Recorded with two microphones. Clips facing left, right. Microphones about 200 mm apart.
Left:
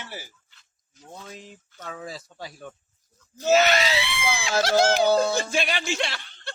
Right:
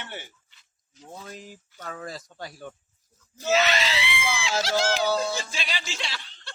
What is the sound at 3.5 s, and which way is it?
Speech, 45° left (ahead or behind).